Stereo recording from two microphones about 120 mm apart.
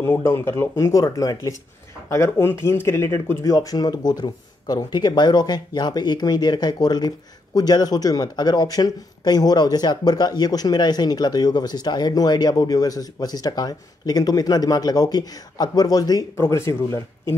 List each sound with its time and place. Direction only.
0.0 s speech: 20° left (ahead or behind)